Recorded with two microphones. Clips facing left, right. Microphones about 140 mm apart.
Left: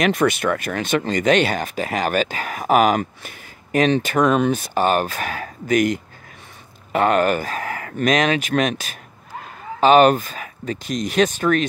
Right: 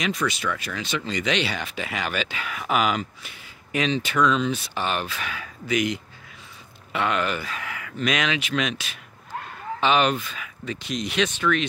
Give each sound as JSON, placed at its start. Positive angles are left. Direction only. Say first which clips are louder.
{"t": 0.0, "sound": "speech", "louder": "left 8 dB", "side_deg": 55}